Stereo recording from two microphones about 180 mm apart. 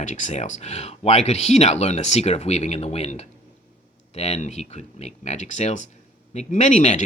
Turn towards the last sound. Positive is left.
turn(degrees=40)  # may be behind; listen again after turning